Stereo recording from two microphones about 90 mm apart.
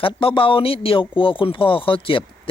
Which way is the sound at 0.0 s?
85° left.